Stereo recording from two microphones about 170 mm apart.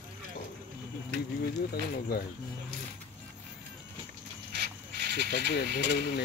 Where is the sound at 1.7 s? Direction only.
65° left (ahead or behind).